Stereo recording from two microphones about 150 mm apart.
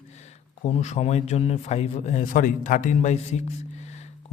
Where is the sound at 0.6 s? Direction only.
50° left (ahead or behind).